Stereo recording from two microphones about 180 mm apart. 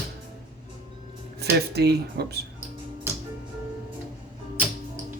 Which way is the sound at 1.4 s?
65° right (ahead or behind).